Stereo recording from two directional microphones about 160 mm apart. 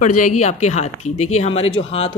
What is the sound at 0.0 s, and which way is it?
Speech, 55° left (ahead or behind).